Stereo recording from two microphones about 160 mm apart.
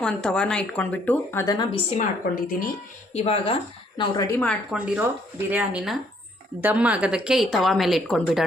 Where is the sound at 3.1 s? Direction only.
40° left (ahead or behind).